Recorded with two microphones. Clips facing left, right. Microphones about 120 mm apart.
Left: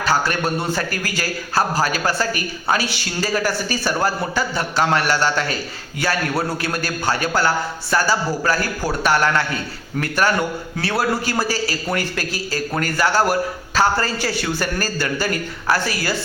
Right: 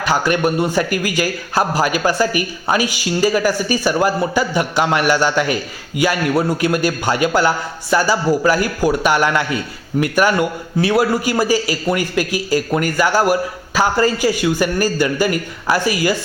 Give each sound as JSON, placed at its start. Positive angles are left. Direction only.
{"t": 0.0, "sound": "a man's voice", "side_deg": -15}